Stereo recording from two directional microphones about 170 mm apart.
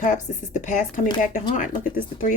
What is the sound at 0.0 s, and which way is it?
A woman's voice, 50° left (ahead or behind).